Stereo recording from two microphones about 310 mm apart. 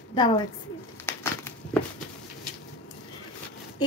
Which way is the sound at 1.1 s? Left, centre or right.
Centre.